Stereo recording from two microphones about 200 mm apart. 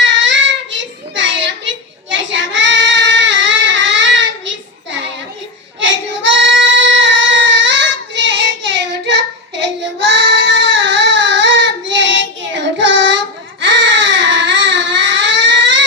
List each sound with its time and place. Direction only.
0.0 s child singing: 65° right (ahead or behind)
5.8 s child singing: 65° right (ahead or behind)
13.6 s baby cry: 65° right (ahead or behind)